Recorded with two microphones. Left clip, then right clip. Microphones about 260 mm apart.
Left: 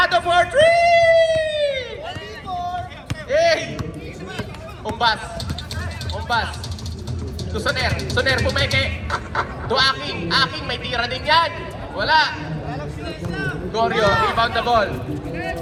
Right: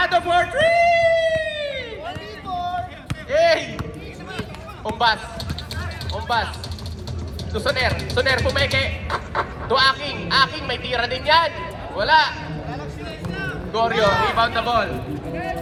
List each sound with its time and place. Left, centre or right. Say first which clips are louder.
0.0 s a sound: left 2 dB; left
3.2 s basketball bounce: even; centre
4.9 s basketball bounce: even; right
6.1 s vehicle: even; right
7.5 s speech: right 1 dB; right
13.3 s a sound: left 2 dB; centre
13.7 s speech: even; right
14.3 s speech: left 1 dB; centre